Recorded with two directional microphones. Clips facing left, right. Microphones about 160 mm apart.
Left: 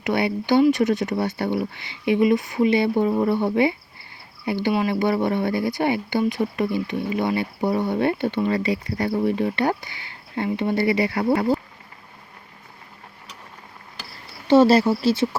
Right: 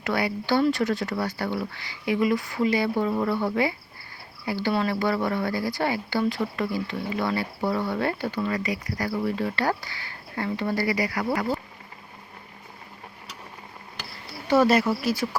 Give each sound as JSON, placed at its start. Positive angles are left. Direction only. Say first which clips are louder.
{"t": 0.0, "sound": "a woman's voice", "louder": "left 4 dB", "side_deg": 20}
{"t": 14.4, "sound": "a woman's voice", "louder": "left 5 dB", "side_deg": 30}